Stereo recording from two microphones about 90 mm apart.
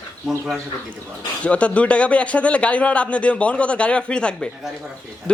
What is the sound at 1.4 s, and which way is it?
A man's voice, 15° left (ahead or behind).